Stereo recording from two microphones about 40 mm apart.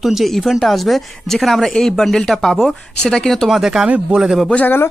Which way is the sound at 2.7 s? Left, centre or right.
Centre.